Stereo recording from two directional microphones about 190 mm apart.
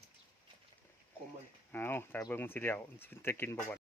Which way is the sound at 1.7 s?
10° left (ahead or behind).